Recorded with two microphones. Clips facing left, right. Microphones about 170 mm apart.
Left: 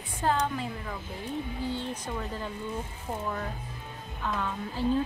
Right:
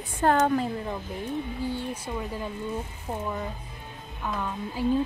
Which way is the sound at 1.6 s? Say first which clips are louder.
Right 2 dB; 10° right (ahead or behind).